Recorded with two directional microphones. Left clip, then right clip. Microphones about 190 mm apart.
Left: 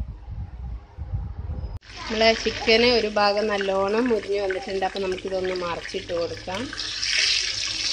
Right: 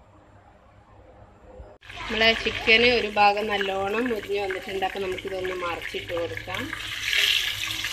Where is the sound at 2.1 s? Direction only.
10° left (ahead or behind).